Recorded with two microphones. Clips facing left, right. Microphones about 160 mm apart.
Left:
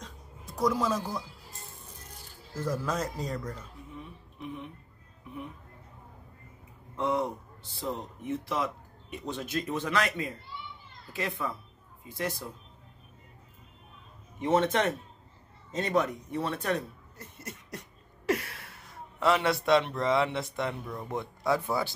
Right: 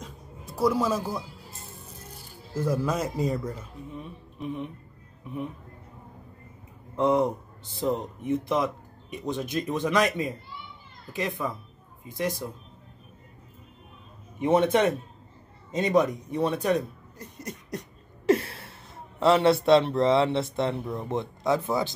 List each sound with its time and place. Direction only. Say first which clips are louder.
0.0 s music: right 4 dB; 5° right (ahead or behind)
2.5 s speech: right 5 dB; 10° right (ahead or behind)
7.0 s speech: right 7 dB; 20° right (ahead or behind)
14.4 s speech: right 4 dB; 15° right (ahead or behind)
18.2 s speech: right 7 dB; 30° right (ahead or behind)